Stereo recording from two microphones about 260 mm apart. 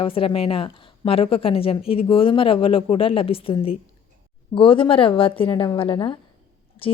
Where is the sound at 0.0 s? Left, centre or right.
Left.